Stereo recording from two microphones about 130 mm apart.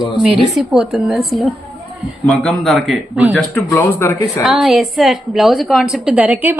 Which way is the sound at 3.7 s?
20° left (ahead or behind).